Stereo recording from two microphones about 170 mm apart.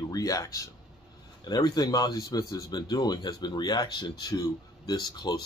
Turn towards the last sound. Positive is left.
turn(degrees=25)  # may be behind; listen again after turning